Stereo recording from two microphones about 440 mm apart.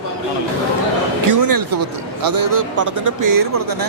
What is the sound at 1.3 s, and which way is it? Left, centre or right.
A man's voice, right.